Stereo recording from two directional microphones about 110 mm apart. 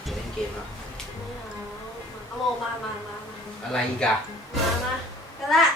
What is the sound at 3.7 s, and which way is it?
Speech, 5° left (ahead or behind).